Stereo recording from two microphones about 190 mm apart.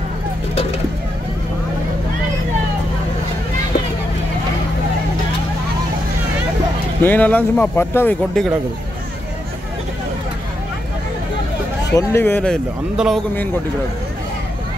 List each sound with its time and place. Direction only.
7.0 s speech: 10° left (ahead or behind)
11.9 s speech: 15° left (ahead or behind)
12.9 s a man's voice: 5° right (ahead or behind)